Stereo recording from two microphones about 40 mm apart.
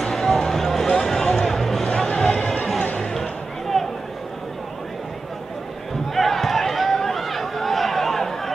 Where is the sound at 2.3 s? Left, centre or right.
Left.